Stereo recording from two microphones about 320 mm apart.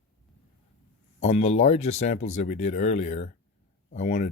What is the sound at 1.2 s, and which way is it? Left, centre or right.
Speech, centre.